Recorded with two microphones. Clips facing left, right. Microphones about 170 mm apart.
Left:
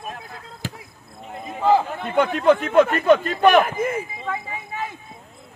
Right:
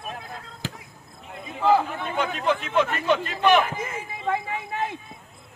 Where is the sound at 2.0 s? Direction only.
55° left (ahead or behind).